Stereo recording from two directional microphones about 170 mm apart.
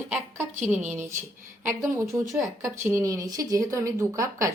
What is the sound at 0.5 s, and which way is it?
Speech, 45° right (ahead or behind).